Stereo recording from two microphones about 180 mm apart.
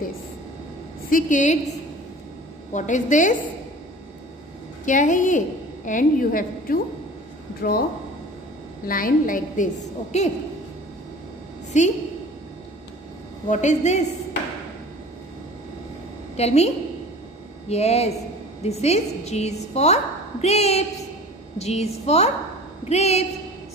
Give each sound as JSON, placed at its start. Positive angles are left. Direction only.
{"t": 1.1, "sound": "a woman's voice", "side_deg": 45}
{"t": 2.7, "sound": "a woman's voice", "side_deg": 45}
{"t": 4.8, "sound": "a woman's voice", "side_deg": 45}
{"t": 8.8, "sound": "a woman's voice", "side_deg": 50}
{"t": 11.7, "sound": "a woman's voice", "side_deg": 40}
{"t": 13.5, "sound": "a woman's voice", "side_deg": 40}
{"t": 16.3, "sound": "a woman's voice", "side_deg": 35}